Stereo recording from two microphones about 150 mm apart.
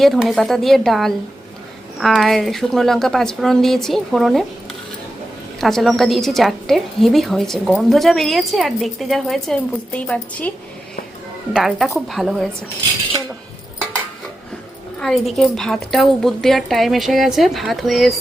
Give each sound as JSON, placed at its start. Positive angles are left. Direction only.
{"t": 0.0, "sound": "a woman's voice", "side_deg": 0}
{"t": 5.5, "sound": "a woman's voice", "side_deg": 0}
{"t": 11.5, "sound": "a woman's voice", "side_deg": 0}
{"t": 14.9, "sound": "a woman's voice", "side_deg": 0}